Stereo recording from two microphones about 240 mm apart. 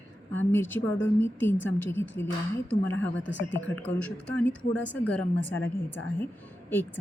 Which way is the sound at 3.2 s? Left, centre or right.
Left.